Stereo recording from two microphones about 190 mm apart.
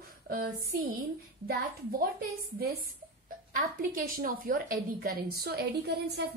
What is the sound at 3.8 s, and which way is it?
A woman's voice, 50° right (ahead or behind).